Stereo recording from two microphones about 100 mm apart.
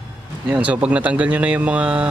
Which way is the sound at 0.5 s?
15° right (ahead or behind).